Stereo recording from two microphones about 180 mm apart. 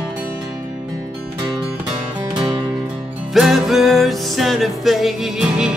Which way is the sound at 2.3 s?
25° right (ahead or behind).